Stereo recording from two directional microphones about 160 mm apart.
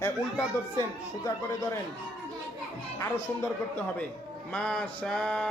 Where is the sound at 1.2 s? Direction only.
20° left (ahead or behind).